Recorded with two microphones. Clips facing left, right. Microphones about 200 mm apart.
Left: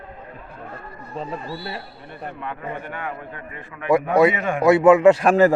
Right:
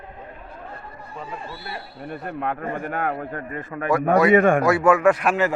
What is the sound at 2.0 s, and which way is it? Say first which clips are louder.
A man's voice: right 6 dB; 50° right (ahead or behind).